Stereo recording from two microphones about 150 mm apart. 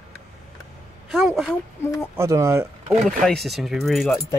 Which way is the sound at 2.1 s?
20° right (ahead or behind).